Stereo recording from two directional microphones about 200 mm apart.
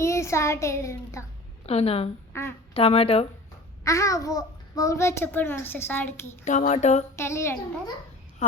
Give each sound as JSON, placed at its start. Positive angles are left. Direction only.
{"t": 0.0, "sound": "a child's voice", "side_deg": 15}
{"t": 1.6, "sound": "a woman's voice", "side_deg": 30}
{"t": 2.3, "sound": "speech", "side_deg": 15}
{"t": 2.7, "sound": "speech", "side_deg": 30}
{"t": 3.8, "sound": "a child's voice", "side_deg": 15}
{"t": 6.4, "sound": "a sound", "side_deg": 40}
{"t": 7.2, "sound": "a child's voice", "side_deg": 15}
{"t": 8.4, "sound": "speech", "side_deg": 35}